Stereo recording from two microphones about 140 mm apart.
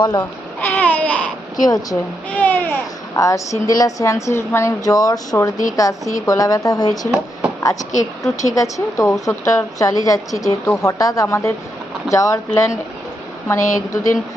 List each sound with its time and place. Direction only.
0.0 s a woman's voice: 30° left (ahead or behind)
0.6 s babbling: 10° left (ahead or behind)
1.5 s a woman's voice: 25° left (ahead or behind)
2.3 s a sound: 15° left (ahead or behind)
3.2 s a woman's voice: 25° left (ahead or behind)
13.5 s a woman's voice: 20° left (ahead or behind)